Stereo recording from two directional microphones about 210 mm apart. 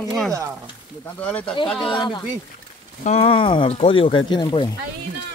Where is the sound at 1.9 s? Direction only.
20° left (ahead or behind).